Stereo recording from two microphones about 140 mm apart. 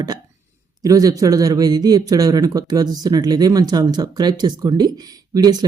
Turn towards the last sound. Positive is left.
turn(degrees=-30)  # may be behind; listen again after turning